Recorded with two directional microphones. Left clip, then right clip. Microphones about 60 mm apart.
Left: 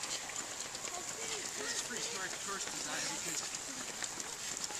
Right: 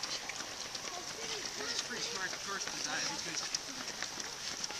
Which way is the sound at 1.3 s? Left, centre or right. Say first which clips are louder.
Right 2 dB; centre.